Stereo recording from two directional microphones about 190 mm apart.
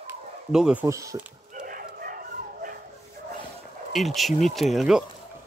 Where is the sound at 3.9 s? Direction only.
Centre (ahead or behind).